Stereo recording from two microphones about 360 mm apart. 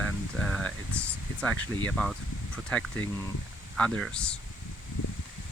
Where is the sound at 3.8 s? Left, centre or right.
Centre.